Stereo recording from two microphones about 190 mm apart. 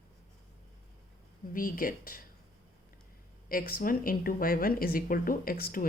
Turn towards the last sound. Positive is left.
turn(degrees=50)  # may be behind; listen again after turning